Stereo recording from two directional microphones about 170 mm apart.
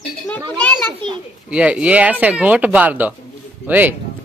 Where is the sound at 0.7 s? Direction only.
25° right (ahead or behind).